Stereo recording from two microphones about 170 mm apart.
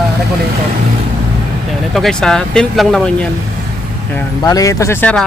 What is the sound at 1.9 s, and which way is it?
Speech, centre (ahead or behind).